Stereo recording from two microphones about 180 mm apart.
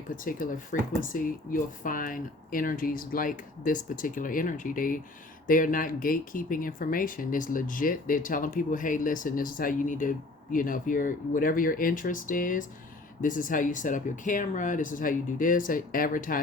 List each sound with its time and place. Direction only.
0.2 s speech: 50° left (ahead or behind)